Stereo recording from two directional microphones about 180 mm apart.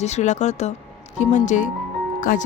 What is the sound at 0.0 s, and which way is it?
Speech, 40° left (ahead or behind).